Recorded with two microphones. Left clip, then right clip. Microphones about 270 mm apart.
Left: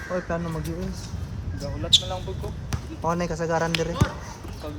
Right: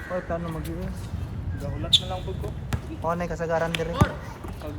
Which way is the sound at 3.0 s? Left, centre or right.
Left.